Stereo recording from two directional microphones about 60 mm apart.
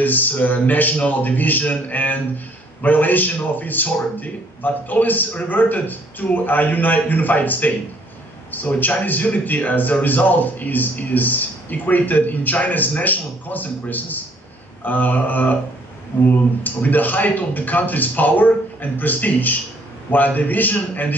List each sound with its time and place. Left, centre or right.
0.0 s a man's voice: left